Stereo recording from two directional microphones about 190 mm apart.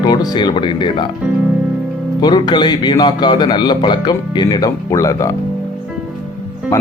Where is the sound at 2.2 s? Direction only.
20° left (ahead or behind).